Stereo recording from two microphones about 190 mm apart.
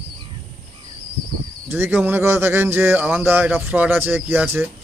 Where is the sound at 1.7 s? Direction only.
10° right (ahead or behind).